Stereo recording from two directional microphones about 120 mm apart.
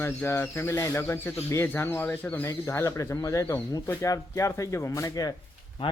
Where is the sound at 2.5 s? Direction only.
25° left (ahead or behind).